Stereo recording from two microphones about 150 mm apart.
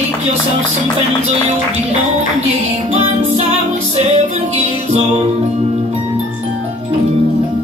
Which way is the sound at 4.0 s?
45° right (ahead or behind).